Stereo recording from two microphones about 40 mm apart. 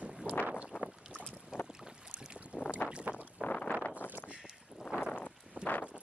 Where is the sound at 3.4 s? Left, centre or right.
Right.